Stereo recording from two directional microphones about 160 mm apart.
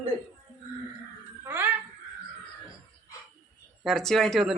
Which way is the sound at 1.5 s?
10° right (ahead or behind).